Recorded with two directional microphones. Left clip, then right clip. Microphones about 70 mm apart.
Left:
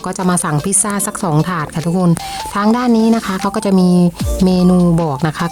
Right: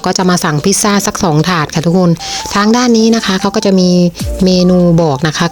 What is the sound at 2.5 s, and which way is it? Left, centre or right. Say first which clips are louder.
Speech: right 4 dB; right.